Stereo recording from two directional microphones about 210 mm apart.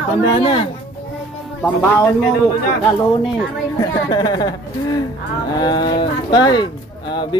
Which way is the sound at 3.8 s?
20° left (ahead or behind).